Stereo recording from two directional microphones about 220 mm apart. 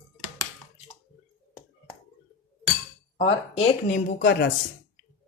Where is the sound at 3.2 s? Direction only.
25° left (ahead or behind).